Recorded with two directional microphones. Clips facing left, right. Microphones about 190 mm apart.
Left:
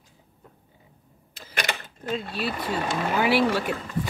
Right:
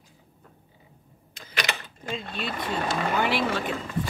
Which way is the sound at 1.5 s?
50° left (ahead or behind).